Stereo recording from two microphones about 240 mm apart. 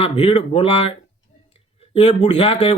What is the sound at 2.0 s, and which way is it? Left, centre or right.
Speech, left.